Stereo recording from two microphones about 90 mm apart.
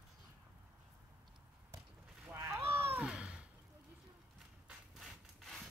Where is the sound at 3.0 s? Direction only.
10° right (ahead or behind).